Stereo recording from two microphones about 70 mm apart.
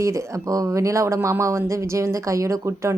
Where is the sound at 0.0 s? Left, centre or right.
Right.